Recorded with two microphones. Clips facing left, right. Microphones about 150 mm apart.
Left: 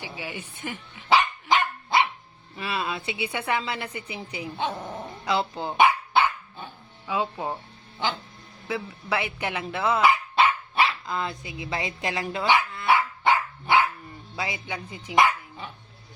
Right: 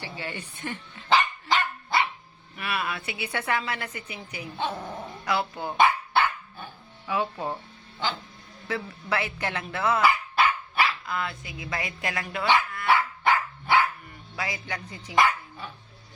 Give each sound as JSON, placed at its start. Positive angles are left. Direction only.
{"t": 0.0, "sound": "dog", "side_deg": 10}
{"t": 2.6, "sound": "a woman's voice", "side_deg": 25}
{"t": 4.4, "sound": "a woman's voice", "side_deg": 15}
{"t": 5.7, "sound": "dog", "side_deg": 15}
{"t": 7.1, "sound": "a woman's voice", "side_deg": 20}
{"t": 8.6, "sound": "speech", "side_deg": 15}
{"t": 12.3, "sound": "dog", "side_deg": 20}
{"t": 14.3, "sound": "speech", "side_deg": 25}